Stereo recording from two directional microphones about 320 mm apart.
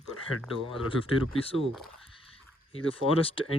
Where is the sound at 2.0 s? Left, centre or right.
Centre.